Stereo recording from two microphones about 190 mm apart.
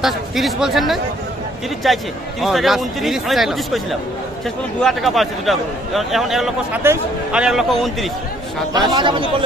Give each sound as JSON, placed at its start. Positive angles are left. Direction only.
{"t": 0.0, "sound": "a man's voice", "side_deg": 0}
{"t": 4.8, "sound": "a man's voice", "side_deg": 0}
{"t": 8.7, "sound": "speech", "side_deg": -25}